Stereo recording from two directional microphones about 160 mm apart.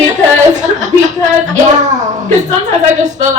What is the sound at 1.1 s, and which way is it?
A woman's voice, 50° right (ahead or behind).